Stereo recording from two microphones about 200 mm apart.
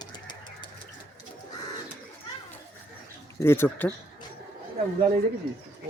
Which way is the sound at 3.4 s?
10° left (ahead or behind).